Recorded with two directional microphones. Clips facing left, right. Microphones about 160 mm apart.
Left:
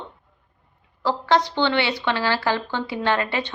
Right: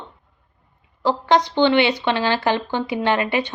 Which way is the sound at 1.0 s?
20° right (ahead or behind).